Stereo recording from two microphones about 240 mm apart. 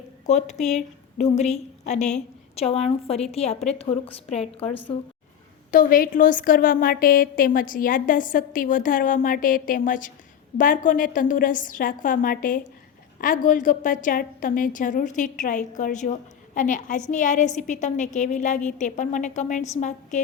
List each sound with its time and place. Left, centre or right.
0.3 s a woman's voice: left
5.7 s a woman's voice: left